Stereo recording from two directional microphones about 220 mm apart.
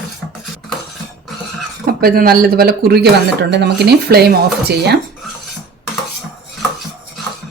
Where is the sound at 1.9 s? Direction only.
45° right (ahead or behind).